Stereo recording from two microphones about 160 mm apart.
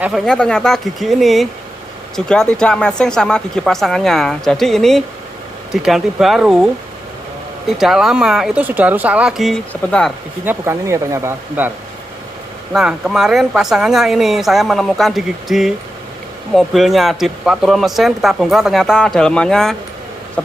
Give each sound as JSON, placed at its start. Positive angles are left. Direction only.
{"t": 0.0, "sound": "speech", "side_deg": 0}
{"t": 7.8, "sound": "speech", "side_deg": 0}
{"t": 10.4, "sound": "speech", "side_deg": -15}
{"t": 12.7, "sound": "speech", "side_deg": -5}